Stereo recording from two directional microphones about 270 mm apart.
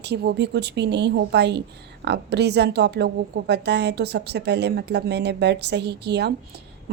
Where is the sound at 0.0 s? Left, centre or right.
Right.